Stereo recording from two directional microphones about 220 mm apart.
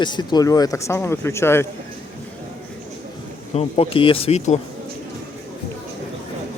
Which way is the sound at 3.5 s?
25° left (ahead or behind).